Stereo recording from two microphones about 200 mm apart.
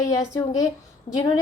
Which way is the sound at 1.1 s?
35° left (ahead or behind).